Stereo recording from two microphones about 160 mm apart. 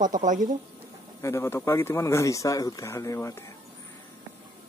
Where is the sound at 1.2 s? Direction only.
15° left (ahead or behind).